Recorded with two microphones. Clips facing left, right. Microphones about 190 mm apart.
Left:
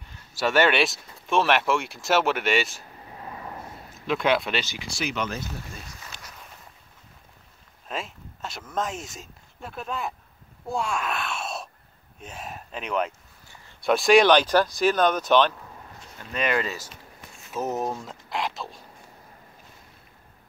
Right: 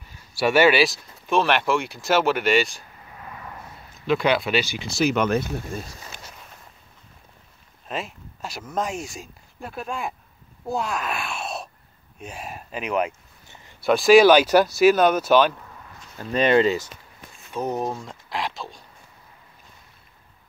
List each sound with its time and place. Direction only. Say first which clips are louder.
0.0 s speech: right 4 dB; 10° right (ahead or behind)
3.1 s a sound: left 2 dB; 30° left (ahead or behind)
3.9 s speech: right 2 dB; centre (ahead or behind)
4.9 s speech: right 9 dB; 45° right (ahead or behind)
7.9 s speech: right 3 dB; 5° right (ahead or behind)
16.2 s speech: right 8 dB; 35° right (ahead or behind)
17.5 s a sound: right 2 dB; 5° left (ahead or behind)